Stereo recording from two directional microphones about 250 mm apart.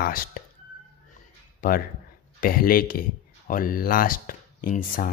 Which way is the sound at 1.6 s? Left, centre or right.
Left.